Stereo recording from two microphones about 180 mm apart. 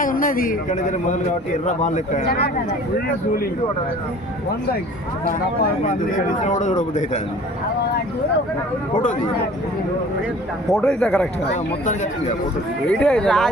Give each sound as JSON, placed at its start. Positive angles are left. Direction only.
{"t": 0.0, "sound": "speech", "side_deg": 50}
{"t": 2.2, "sound": "speech", "side_deg": 60}
{"t": 5.8, "sound": "speech", "side_deg": 50}
{"t": 10.7, "sound": "a man's voice", "side_deg": 5}
{"t": 12.9, "sound": "a man's voice", "side_deg": 5}